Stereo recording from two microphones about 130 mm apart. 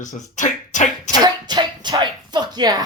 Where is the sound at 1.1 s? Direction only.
35° right (ahead or behind).